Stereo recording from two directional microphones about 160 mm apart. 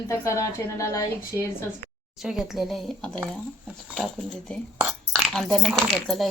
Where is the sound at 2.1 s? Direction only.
Centre (ahead or behind).